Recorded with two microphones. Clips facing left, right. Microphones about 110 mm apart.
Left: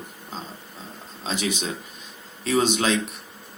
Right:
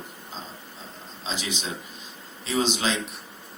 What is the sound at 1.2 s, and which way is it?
Speech, 55° left (ahead or behind).